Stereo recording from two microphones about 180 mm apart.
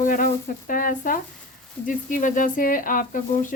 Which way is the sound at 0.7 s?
50° left (ahead or behind).